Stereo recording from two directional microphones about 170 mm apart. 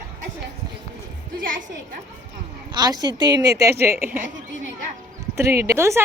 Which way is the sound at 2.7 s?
25° right (ahead or behind).